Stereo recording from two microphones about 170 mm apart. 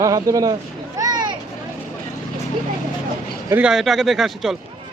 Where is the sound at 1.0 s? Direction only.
25° right (ahead or behind).